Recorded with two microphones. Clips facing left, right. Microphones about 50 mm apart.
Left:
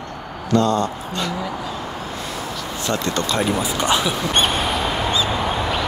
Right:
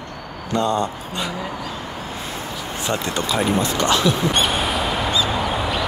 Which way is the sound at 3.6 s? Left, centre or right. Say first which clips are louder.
Right 1 dB; centre.